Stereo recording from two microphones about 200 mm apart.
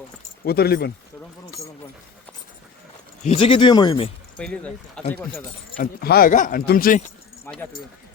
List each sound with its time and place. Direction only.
0.4 s speech: 50° left (ahead or behind)
3.2 s speech: 25° left (ahead or behind)
4.4 s speech: 5° left (ahead or behind)
5.7 s speech: 45° left (ahead or behind)
7.4 s speech: 10° left (ahead or behind)